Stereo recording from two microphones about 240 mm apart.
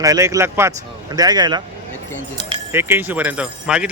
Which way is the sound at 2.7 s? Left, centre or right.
Centre.